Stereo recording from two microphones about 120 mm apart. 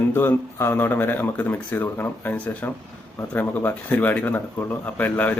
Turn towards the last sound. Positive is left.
turn(degrees=15)  # may be behind; listen again after turning